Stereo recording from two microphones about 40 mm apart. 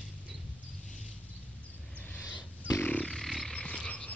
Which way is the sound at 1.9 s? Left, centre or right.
Left.